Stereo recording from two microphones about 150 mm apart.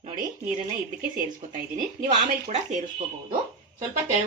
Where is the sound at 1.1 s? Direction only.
65° right (ahead or behind).